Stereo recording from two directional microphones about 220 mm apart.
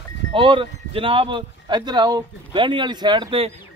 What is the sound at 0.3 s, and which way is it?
Speech, 25° right (ahead or behind).